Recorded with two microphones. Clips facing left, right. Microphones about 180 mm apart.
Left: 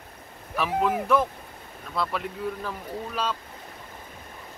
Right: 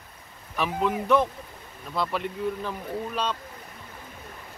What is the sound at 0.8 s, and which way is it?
Speech, 5° left (ahead or behind).